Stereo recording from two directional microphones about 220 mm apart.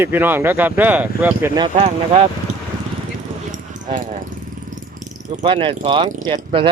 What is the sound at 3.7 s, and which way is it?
Speech, 35° right (ahead or behind).